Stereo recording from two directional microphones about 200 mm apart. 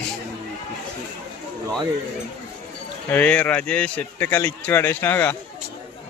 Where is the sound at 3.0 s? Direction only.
10° left (ahead or behind).